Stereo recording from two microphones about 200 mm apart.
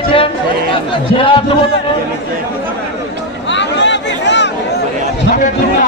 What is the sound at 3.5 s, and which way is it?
Chatter, 65° left (ahead or behind).